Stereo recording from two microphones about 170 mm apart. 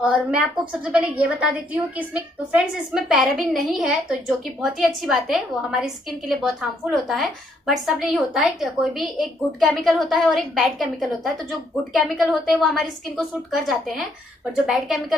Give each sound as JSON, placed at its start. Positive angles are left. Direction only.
{"t": 0.0, "sound": "a woman's voice", "side_deg": -5}
{"t": 2.5, "sound": "a woman's voice", "side_deg": -5}